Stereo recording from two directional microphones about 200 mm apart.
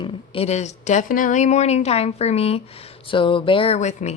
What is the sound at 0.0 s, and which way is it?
Speech, 25° left (ahead or behind).